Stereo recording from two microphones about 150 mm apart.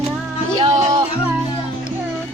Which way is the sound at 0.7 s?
25° right (ahead or behind).